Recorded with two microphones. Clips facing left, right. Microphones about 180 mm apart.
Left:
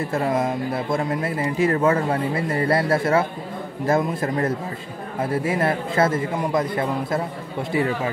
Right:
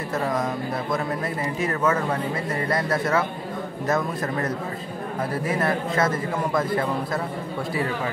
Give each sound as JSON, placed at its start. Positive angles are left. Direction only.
{"t": 0.1, "sound": "speech", "side_deg": 25}